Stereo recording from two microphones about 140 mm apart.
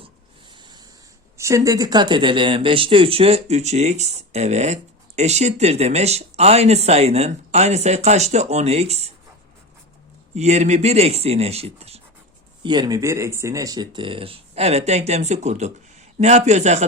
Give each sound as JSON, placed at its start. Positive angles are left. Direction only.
{"t": 0.5, "sound": "a sound", "side_deg": -30}
{"t": 1.4, "sound": "speech", "side_deg": -20}
{"t": 10.3, "sound": "speech", "side_deg": -55}
{"t": 12.6, "sound": "speech", "side_deg": -30}